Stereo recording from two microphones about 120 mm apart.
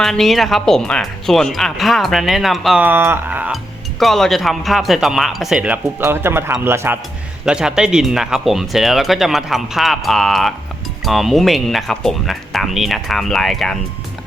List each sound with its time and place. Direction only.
0.0 s speech: 5° left (ahead or behind)
2.8 s speech: 15° right (ahead or behind)
4.0 s speech: centre (ahead or behind); by 7.0 s 20° right (ahead or behind)
7.4 s speech: 5° right (ahead or behind)